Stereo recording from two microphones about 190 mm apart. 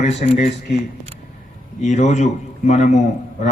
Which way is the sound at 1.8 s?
40° left (ahead or behind).